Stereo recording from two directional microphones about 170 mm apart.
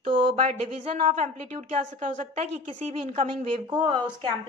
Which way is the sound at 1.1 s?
45° right (ahead or behind).